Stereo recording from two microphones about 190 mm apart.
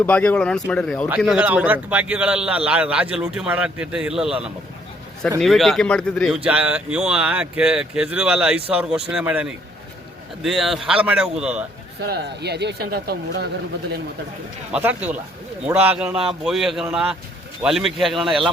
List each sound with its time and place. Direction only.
0.0 s a man's voice: 5° left (ahead or behind)
11.9 s speech: 60° right (ahead or behind)
14.7 s a man's voice: 10° right (ahead or behind)